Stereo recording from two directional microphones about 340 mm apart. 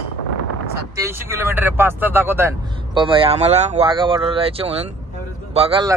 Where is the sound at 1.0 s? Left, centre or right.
Centre.